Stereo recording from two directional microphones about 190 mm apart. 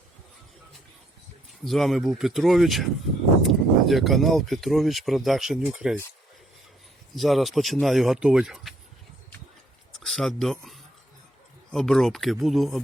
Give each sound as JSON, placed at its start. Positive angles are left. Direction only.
{"t": 1.6, "sound": "speech", "side_deg": 0}
{"t": 7.2, "sound": "speech", "side_deg": 0}
{"t": 10.0, "sound": "speech", "side_deg": 0}